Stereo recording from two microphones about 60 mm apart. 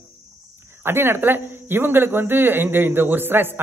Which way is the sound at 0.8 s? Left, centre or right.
Right.